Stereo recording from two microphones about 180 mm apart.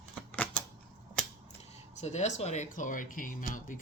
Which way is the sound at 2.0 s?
40° left (ahead or behind).